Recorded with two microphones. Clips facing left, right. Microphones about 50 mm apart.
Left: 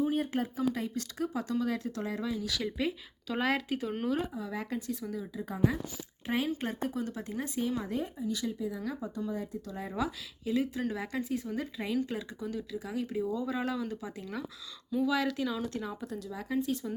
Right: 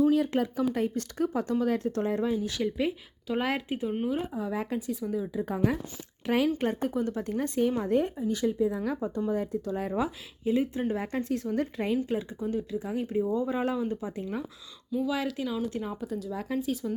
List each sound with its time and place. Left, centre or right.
0.0 s speech: right
0.7 s speech: right; by 4.8 s centre
4.9 s speech: centre
6.2 s speech: right
8.3 s speech: right
11.2 s speech: right
11.9 s speech: right
14.9 s speech: centre
16.0 s speech: centre